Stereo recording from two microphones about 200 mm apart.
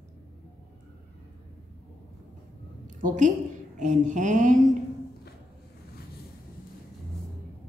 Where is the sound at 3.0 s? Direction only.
40° right (ahead or behind).